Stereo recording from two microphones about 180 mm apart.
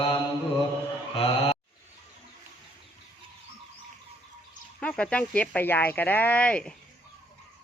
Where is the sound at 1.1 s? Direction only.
30° left (ahead or behind).